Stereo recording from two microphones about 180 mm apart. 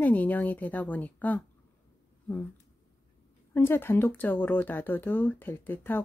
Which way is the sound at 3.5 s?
10° left (ahead or behind).